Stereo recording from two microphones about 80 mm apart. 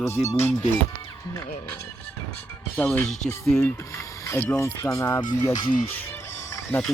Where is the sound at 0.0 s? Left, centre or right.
Left.